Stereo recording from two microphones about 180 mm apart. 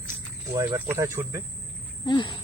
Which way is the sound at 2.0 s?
25° left (ahead or behind).